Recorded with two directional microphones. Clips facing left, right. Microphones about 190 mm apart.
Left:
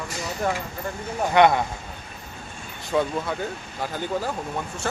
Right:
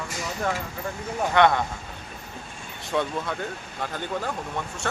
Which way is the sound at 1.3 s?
15° left (ahead or behind).